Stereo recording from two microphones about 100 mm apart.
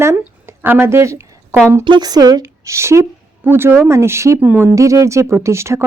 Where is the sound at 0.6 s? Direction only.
20° right (ahead or behind).